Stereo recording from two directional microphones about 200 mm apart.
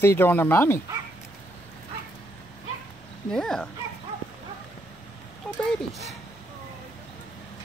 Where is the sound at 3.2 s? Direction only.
Centre (ahead or behind).